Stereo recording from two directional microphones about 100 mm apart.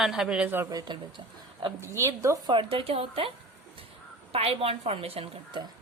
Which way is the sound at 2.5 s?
55° right (ahead or behind).